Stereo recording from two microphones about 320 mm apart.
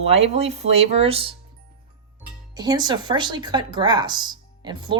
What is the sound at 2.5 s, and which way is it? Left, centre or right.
Speech, centre.